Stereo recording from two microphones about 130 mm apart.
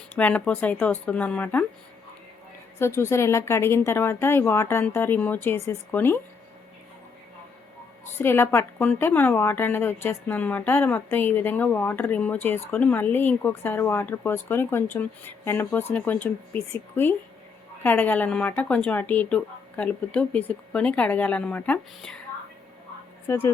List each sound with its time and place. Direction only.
0.2 s a woman's voice: 10° left (ahead or behind)
2.7 s a woman's voice: 20° left (ahead or behind)
8.2 s a woman's voice: 15° left (ahead or behind)
23.3 s a woman's voice: 20° left (ahead or behind)